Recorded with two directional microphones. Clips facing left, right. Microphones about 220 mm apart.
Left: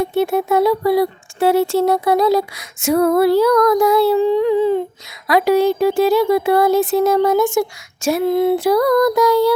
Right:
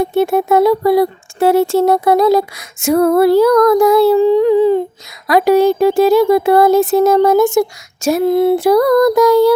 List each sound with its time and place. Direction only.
0.1 s speech: 50° right (ahead or behind)